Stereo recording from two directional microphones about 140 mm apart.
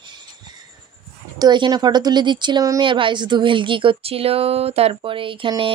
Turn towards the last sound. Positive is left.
turn(degrees=-35)  # may be behind; listen again after turning